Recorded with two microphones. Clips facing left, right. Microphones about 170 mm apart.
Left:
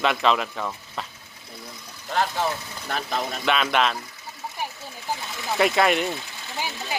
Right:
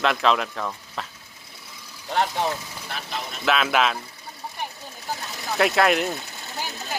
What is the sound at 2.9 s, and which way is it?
Speech, 45° left (ahead or behind).